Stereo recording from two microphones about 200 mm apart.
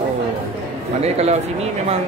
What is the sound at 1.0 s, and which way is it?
Speech, 30° right (ahead or behind).